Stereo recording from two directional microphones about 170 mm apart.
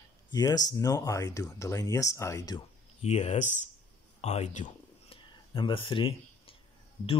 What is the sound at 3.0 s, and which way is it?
Speech, 40° left (ahead or behind).